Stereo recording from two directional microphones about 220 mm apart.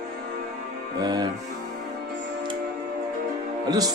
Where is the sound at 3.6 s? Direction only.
15° right (ahead or behind).